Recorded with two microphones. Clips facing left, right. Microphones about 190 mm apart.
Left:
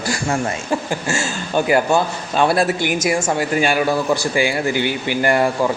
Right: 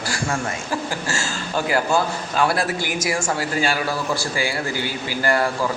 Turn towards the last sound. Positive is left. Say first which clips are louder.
# left 4 dB
turn(degrees=20)  # may be behind; listen again after turning